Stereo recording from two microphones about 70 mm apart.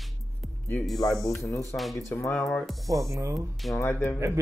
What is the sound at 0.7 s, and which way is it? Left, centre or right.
Speech, centre.